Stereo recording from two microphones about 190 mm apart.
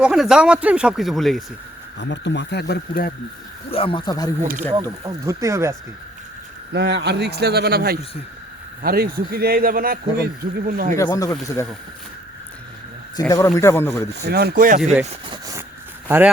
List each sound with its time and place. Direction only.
0.0 s speech: 5° right (ahead or behind)
2.0 s speech: 65° left (ahead or behind)
3.7 s speech: 30° left (ahead or behind)
4.7 s speech: 20° right (ahead or behind)
6.7 s a man's voice: 65° right (ahead or behind); by 10.9 s 50° right (ahead or behind)
10.9 s speech: 20° left (ahead or behind)
13.1 s speech: 15° left (ahead or behind)
14.3 s speech: 55° right (ahead or behind)
16.0 s speech: 10° right (ahead or behind)